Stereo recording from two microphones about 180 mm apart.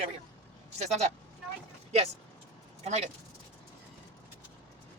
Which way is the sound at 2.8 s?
40° right (ahead or behind).